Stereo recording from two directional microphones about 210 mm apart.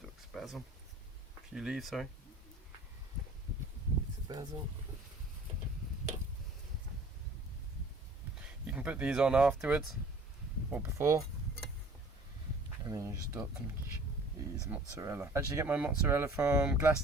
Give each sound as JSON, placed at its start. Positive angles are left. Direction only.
{"t": 0.0, "sound": "a sound", "side_deg": 0}
{"t": 1.5, "sound": "speech", "side_deg": -5}
{"t": 4.3, "sound": "speech", "side_deg": -20}
{"t": 8.4, "sound": "speech", "side_deg": -5}
{"t": 12.8, "sound": "speech", "side_deg": -15}
{"t": 14.7, "sound": "speech", "side_deg": -10}